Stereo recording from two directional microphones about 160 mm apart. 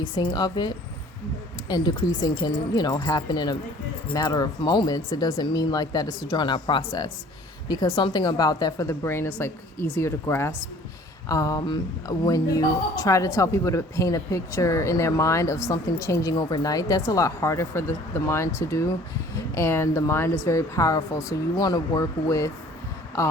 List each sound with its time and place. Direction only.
0.0 s a woman's voice: 25° left (ahead or behind)